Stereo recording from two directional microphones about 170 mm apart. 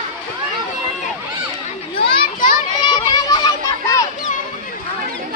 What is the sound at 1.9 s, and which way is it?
Children playing, 30° left (ahead or behind).